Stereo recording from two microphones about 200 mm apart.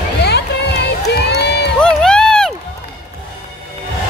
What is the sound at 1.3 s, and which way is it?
Crowd, 55° left (ahead or behind).